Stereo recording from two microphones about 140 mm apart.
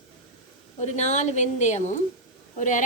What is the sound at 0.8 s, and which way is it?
A woman's voice, 55° left (ahead or behind).